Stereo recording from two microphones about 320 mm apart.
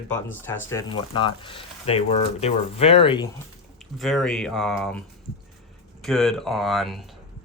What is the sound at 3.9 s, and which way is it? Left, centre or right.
Speech, centre.